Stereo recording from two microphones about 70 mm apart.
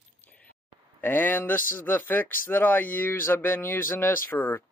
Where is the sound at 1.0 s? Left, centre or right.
Left.